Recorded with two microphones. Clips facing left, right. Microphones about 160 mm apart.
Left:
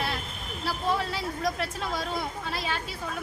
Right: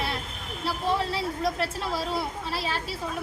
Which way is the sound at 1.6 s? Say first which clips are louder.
Right 2 dB; 5° right (ahead or behind).